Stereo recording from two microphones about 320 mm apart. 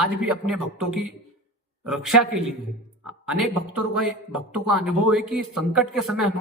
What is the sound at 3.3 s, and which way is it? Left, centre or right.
Speech, right.